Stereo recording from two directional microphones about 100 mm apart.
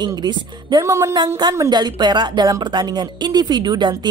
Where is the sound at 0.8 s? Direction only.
30° right (ahead or behind).